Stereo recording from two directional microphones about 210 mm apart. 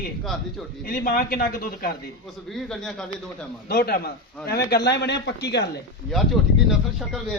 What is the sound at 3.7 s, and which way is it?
A man's voice, 50° left (ahead or behind).